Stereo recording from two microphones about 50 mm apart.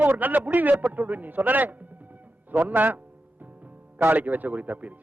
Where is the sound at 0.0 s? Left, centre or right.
Right.